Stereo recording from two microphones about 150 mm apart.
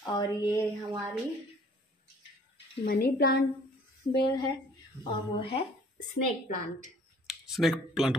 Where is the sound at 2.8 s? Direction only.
80° left.